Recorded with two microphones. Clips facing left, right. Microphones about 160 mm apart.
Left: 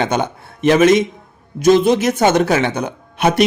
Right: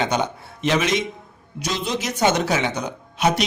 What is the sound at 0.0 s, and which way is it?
Speech, 55° left (ahead or behind).